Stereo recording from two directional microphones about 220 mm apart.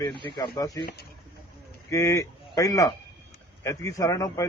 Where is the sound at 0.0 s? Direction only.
20° left (ahead or behind).